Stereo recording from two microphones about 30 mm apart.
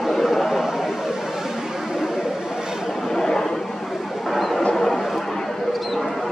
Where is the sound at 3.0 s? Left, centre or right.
Left.